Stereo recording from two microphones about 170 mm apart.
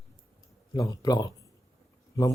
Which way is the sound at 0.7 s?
20° left (ahead or behind).